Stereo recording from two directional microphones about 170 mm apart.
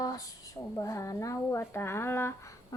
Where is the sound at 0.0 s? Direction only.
20° left (ahead or behind).